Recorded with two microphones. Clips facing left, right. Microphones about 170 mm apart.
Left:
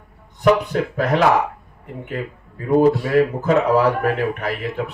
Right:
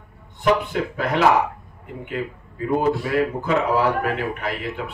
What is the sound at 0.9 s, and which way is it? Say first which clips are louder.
Speech: left 1 dB; 40° left (ahead or behind).